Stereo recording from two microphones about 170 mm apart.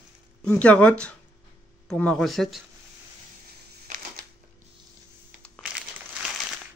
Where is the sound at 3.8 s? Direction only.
55° right (ahead or behind).